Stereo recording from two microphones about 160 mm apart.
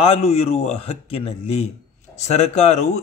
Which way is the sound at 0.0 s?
40° left (ahead or behind).